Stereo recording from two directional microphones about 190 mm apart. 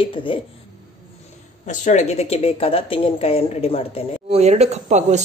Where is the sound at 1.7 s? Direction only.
40° left (ahead or behind).